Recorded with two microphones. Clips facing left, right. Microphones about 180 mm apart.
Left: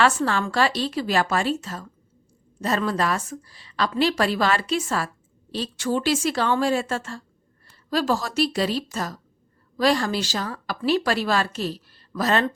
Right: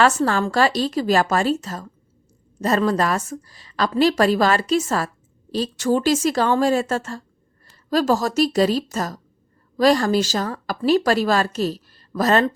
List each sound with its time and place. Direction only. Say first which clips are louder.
0.0 s a woman's voice: right 3 dB; 40° right (ahead or behind)